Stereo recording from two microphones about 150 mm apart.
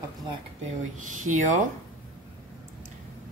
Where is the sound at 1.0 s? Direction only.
60° right (ahead or behind).